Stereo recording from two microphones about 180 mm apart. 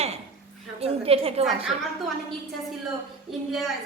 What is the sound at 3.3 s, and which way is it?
Speech, centre (ahead or behind).